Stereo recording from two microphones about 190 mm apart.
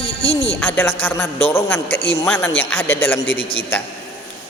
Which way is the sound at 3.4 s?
30° left (ahead or behind).